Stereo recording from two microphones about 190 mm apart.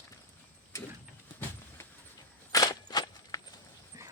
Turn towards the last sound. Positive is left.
turn(degrees=-15)  # may be behind; listen again after turning